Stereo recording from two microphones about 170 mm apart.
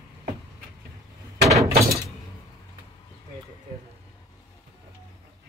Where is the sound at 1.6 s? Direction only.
20° right (ahead or behind).